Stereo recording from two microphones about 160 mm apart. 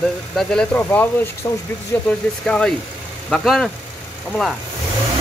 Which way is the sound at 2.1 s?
5° left (ahead or behind).